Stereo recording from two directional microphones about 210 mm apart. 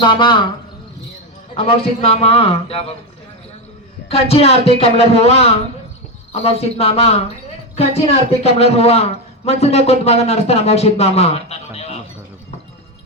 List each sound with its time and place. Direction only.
0.0 s a man's voice: 20° left (ahead or behind)
1.5 s a man's voice: 25° left (ahead or behind)
4.1 s a man's voice: 30° left (ahead or behind)
8.3 s a man's voice: 30° left (ahead or behind)